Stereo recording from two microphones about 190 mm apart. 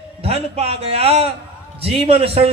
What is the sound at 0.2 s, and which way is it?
A man's voice, 30° right (ahead or behind).